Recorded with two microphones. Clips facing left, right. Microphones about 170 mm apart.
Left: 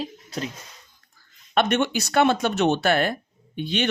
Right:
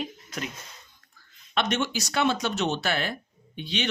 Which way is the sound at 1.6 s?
55° left (ahead or behind).